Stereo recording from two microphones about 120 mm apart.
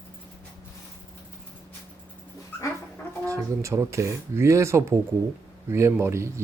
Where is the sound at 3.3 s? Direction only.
25° right (ahead or behind).